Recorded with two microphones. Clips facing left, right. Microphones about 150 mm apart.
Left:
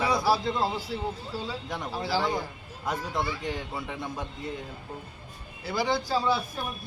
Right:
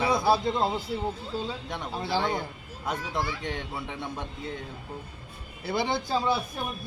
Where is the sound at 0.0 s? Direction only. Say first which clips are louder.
Right 1 dB; 20° right (ahead or behind).